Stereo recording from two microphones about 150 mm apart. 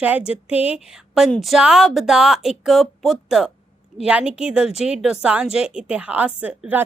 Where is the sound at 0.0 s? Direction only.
10° right (ahead or behind).